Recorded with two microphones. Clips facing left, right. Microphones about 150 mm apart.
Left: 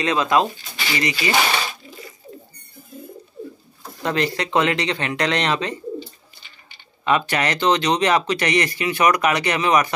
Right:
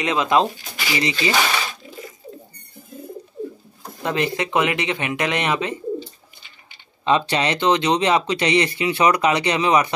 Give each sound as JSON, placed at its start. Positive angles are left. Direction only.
{"t": 0.0, "sound": "speech", "side_deg": -20}
{"t": 4.0, "sound": "speech", "side_deg": -15}
{"t": 7.1, "sound": "speech", "side_deg": -25}